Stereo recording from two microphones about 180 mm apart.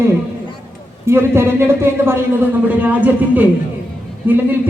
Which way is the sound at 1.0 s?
15° right (ahead or behind).